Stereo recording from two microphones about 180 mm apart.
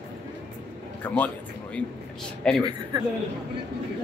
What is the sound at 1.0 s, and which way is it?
A man's voice, 10° left (ahead or behind).